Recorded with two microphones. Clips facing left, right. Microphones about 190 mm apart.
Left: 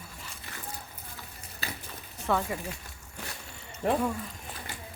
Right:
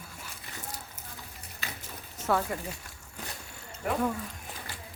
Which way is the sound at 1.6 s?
35° left (ahead or behind).